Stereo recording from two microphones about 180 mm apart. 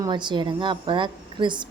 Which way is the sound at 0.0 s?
25° right (ahead or behind).